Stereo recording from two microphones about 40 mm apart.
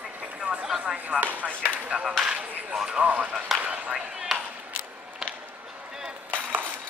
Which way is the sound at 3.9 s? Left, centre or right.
Centre.